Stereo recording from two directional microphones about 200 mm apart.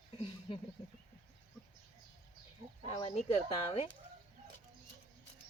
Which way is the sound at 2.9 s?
25° left (ahead or behind).